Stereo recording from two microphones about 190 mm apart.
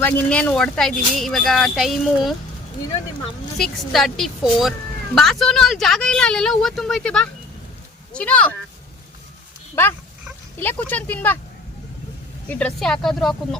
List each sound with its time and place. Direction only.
0.0 s speech: 5° left (ahead or behind)
3.6 s speech: centre (ahead or behind)
10.6 s speech: 10° left (ahead or behind)
12.5 s speech: 5° left (ahead or behind)